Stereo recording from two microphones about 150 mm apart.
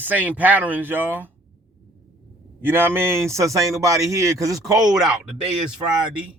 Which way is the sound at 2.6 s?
15° right (ahead or behind).